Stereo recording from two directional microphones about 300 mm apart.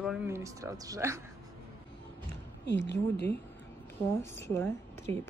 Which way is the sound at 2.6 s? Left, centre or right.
Left.